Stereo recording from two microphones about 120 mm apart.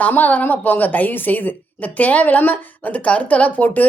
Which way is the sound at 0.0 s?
15° left (ahead or behind).